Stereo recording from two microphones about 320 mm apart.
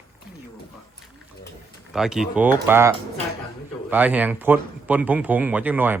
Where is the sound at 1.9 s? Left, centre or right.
Centre.